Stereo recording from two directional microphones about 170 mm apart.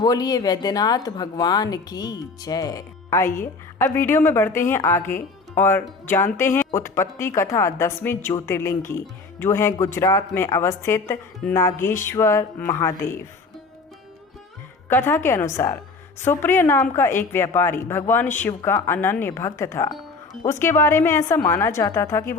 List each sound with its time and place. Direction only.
0.0 s a woman's voice: 20° left (ahead or behind)
14.8 s a woman's voice: 10° left (ahead or behind)